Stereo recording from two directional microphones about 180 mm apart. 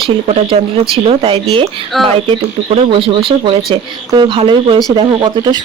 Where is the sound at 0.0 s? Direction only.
30° right (ahead or behind).